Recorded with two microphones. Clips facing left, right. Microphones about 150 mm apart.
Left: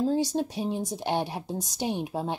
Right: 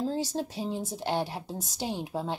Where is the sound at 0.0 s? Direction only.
15° left (ahead or behind).